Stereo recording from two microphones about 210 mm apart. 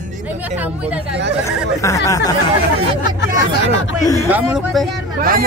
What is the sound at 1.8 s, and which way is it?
Speech, 15° left (ahead or behind).